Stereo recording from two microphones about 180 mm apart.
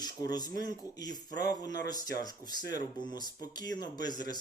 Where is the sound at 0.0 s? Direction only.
20° left (ahead or behind).